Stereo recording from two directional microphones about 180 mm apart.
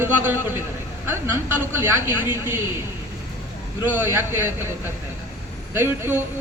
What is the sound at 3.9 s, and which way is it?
Speech, 10° right (ahead or behind).